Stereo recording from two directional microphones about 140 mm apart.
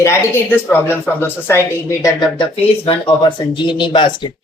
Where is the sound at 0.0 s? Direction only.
20° left (ahead or behind).